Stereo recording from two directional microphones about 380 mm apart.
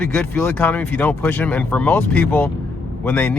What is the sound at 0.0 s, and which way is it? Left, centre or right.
Speech, centre.